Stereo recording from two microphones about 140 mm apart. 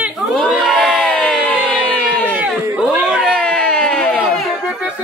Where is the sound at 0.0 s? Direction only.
5° right (ahead or behind).